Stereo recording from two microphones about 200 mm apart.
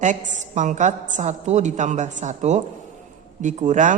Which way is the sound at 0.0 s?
35° right (ahead or behind).